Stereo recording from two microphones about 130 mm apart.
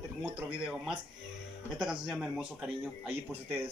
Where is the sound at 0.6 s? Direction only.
5° right (ahead or behind).